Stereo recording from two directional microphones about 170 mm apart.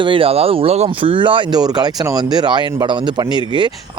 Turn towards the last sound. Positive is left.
turn(degrees=-25)  # may be behind; listen again after turning